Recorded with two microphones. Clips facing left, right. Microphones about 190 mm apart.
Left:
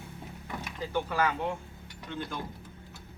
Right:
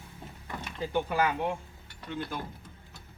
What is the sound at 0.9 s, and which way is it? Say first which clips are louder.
Speech: right 1 dB; 15° right (ahead or behind).